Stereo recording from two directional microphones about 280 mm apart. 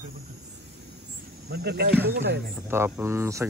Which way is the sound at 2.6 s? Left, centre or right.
Centre.